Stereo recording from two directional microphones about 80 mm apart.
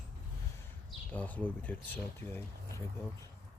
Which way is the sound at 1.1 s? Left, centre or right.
Centre.